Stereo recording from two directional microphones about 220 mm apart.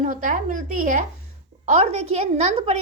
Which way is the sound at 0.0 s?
35° right (ahead or behind).